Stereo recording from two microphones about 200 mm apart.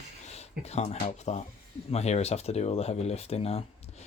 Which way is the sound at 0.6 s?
35° left (ahead or behind).